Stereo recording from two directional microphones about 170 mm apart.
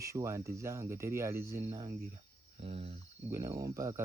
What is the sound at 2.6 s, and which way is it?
Speech, 35° right (ahead or behind).